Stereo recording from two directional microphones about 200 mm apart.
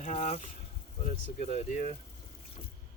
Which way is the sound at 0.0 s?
35° left (ahead or behind).